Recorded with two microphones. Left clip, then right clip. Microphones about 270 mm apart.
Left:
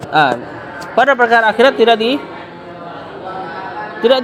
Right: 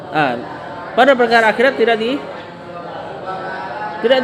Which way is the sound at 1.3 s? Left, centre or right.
Left.